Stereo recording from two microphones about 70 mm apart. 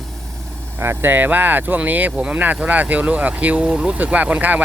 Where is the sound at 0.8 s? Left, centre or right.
Right.